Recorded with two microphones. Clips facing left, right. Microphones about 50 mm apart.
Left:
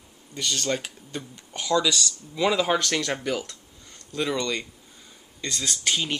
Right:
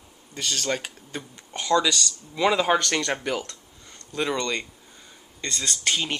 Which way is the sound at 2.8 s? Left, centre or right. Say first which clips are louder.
Right 1 dB; centre.